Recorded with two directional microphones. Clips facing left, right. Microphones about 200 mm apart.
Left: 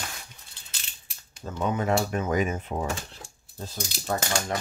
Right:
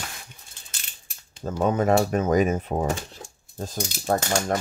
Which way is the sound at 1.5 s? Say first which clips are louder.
Right 5 dB; 40° right (ahead or behind).